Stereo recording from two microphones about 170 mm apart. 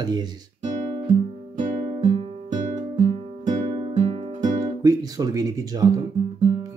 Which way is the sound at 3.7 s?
35° right (ahead or behind).